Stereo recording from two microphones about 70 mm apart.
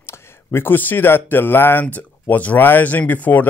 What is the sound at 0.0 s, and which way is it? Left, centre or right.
Speech, left.